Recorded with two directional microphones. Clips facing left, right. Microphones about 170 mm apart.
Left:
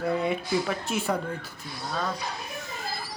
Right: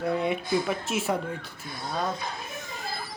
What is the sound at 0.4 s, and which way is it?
Speech, 50° right (ahead or behind).